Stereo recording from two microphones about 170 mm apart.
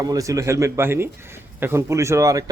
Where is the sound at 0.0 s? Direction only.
20° right (ahead or behind).